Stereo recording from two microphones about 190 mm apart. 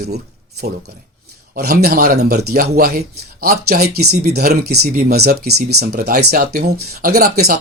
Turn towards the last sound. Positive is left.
turn(degrees=-55)  # may be behind; listen again after turning